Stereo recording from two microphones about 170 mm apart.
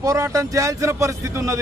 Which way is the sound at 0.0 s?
20° right (ahead or behind).